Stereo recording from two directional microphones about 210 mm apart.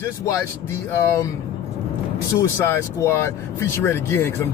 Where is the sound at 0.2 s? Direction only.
15° left (ahead or behind).